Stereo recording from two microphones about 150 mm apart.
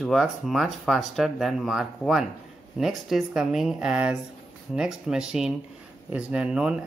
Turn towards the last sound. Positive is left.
turn(degrees=-5)  # may be behind; listen again after turning